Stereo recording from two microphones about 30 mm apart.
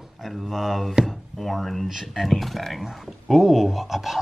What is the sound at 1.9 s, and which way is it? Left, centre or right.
Speech, centre.